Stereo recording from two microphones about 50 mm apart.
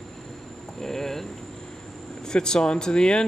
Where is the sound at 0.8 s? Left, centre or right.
Centre.